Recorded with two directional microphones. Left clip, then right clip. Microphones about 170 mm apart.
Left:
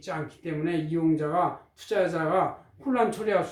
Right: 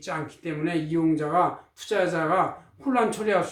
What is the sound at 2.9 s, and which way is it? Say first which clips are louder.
Speech: right 2 dB; 15° right (ahead or behind).